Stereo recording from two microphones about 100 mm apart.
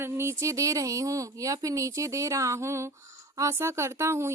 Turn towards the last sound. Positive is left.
turn(degrees=-30)  # may be behind; listen again after turning